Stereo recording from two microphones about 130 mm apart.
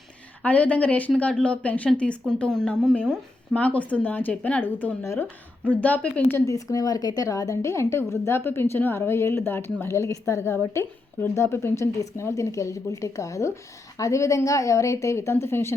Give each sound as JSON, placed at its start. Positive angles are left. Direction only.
{"t": 0.4, "sound": "a woman's voice", "side_deg": 10}